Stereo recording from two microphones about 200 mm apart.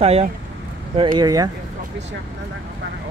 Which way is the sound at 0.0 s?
30° right (ahead or behind).